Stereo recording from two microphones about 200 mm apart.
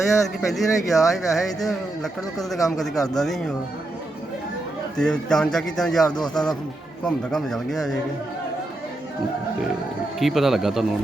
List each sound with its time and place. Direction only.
0.4 s speech: centre (ahead or behind)
4.9 s speech: 5° left (ahead or behind)
6.1 s speech: 20° left (ahead or behind)
7.0 s speech: 5° left (ahead or behind)
10.2 s speech: centre (ahead or behind)